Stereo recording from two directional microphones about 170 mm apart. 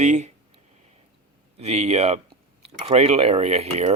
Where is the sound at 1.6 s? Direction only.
40° right (ahead or behind).